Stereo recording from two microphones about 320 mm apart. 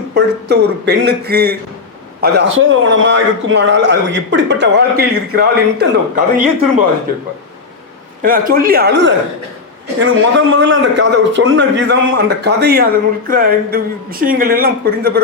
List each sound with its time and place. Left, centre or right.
0.1 s a man's voice: right
8.2 s speech: right
10.3 s a man's voice: right